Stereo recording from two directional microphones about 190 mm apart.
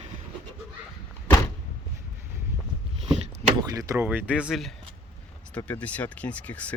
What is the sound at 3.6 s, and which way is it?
Speech, 15° right (ahead or behind).